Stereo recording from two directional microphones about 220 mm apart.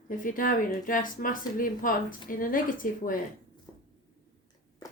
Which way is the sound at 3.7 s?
15° left (ahead or behind).